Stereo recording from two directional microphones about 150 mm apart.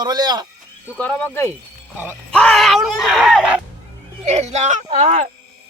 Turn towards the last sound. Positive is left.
turn(degrees=-45)  # may be behind; listen again after turning